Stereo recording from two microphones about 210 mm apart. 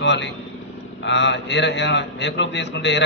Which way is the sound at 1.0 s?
55° left (ahead or behind).